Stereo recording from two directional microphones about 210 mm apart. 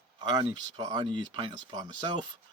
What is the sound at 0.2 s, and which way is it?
A man's voice, 20° right (ahead or behind).